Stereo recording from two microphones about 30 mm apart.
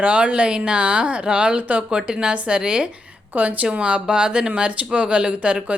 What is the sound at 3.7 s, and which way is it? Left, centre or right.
A woman's voice, right.